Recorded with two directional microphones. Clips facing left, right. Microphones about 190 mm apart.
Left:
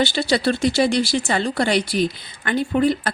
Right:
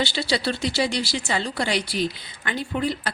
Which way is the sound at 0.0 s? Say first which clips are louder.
Left 5 dB; 50° left (ahead or behind).